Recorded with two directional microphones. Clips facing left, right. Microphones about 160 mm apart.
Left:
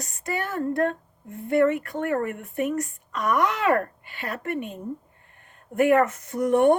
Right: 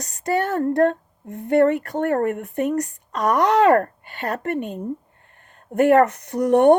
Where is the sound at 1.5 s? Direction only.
40° right (ahead or behind).